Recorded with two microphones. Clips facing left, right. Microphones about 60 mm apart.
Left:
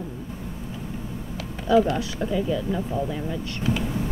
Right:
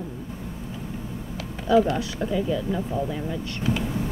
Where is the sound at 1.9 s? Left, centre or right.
Centre.